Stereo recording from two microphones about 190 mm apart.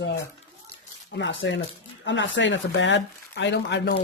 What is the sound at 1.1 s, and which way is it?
Speech, 75° left (ahead or behind).